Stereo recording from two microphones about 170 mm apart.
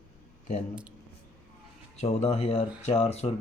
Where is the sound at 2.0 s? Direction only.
40° left (ahead or behind).